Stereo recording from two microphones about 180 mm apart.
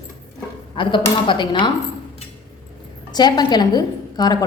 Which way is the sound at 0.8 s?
25° left (ahead or behind).